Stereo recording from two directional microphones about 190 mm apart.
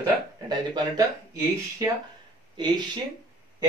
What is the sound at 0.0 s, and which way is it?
Speech, 20° right (ahead or behind).